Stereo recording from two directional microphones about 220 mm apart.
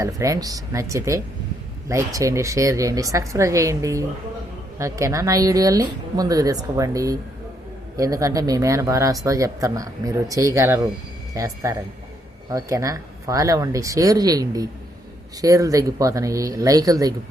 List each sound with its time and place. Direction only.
0.0 s speech: 15° right (ahead or behind)